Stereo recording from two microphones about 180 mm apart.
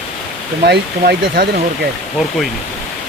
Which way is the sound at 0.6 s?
60° right (ahead or behind).